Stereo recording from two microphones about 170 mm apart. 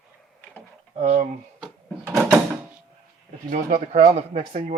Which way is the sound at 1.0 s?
40° right (ahead or behind).